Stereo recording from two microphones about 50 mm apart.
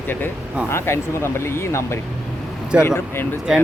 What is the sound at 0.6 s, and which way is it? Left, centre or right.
Speech, left.